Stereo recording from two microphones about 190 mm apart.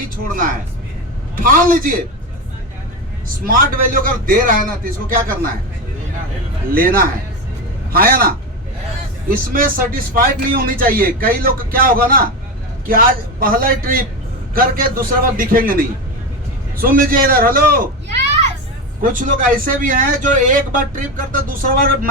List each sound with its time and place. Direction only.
1.4 s a man's voice: 45° right (ahead or behind)
3.4 s a man's voice: 50° right (ahead or behind)
6.7 s a man's voice: 50° right (ahead or behind)
9.5 s a man's voice: 50° right (ahead or behind)
19.1 s a man's voice: 45° right (ahead or behind)